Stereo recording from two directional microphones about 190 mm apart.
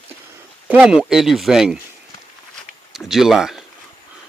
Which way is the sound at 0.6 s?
5° right (ahead or behind).